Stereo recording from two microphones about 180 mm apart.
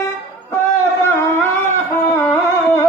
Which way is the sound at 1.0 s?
15° left (ahead or behind).